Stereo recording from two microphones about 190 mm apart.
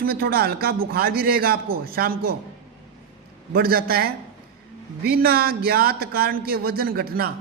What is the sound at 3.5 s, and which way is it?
Speech, 50° right (ahead or behind).